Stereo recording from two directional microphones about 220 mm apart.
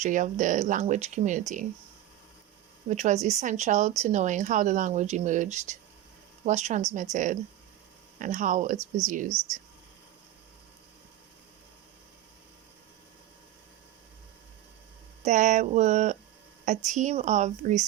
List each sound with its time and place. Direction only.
0.0 s speech: 35° right (ahead or behind)
2.9 s speech: 30° right (ahead or behind)
15.2 s speech: 35° right (ahead or behind)